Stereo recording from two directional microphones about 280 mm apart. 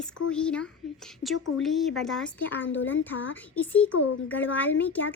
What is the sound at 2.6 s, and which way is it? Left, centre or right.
Speech, left.